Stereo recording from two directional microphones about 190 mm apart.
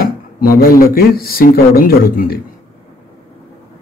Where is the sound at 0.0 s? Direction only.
50° left (ahead or behind).